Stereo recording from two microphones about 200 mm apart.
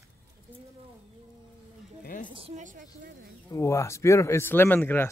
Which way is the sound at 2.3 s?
30° right (ahead or behind).